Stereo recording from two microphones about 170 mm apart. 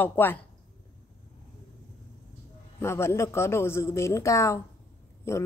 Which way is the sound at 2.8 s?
15° left (ahead or behind).